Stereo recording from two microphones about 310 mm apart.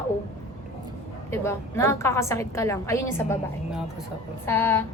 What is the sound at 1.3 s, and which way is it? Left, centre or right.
A woman's voice, centre.